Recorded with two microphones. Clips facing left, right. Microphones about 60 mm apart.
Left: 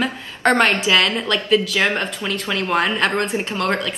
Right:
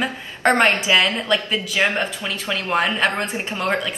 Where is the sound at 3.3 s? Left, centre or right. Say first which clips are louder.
Left 2 dB; centre.